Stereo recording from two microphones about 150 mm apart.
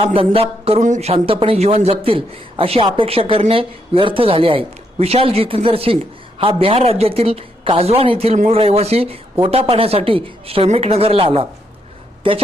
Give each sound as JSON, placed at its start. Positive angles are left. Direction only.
{"t": 0.0, "sound": "a man's voice", "side_deg": -35}
{"t": 0.8, "sound": "a man's voice", "side_deg": -50}